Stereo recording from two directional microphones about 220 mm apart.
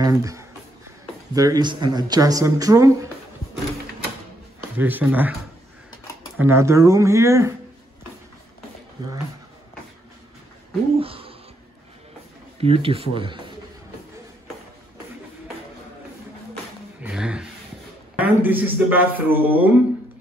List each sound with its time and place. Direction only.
0.0 s a sound: 15° right (ahead or behind)
1.3 s speech: 15° right (ahead or behind)
4.7 s speech: 10° right (ahead or behind)
6.4 s speech: 10° right (ahead or behind)
11.0 s speech: 25° right (ahead or behind)
12.5 s speech: 25° right (ahead or behind)
17.0 s a sound: 5° right (ahead or behind)
18.1 s speech: 10° right (ahead or behind)